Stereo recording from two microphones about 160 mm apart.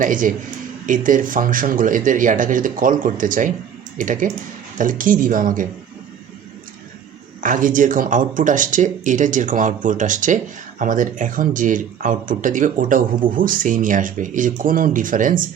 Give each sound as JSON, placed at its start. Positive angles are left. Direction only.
{"t": 0.0, "sound": "speech", "side_deg": -55}
{"t": 7.4, "sound": "speech", "side_deg": -55}